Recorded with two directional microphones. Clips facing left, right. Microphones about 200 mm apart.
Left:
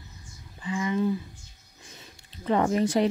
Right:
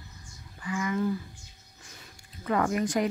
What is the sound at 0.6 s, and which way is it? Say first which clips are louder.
Speech: left 2 dB; 25° left (ahead or behind).